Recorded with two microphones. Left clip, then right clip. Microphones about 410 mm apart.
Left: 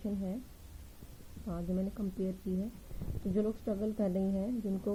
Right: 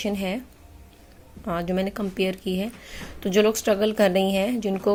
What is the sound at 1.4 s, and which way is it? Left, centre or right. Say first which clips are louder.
Speech: right 14 dB; right.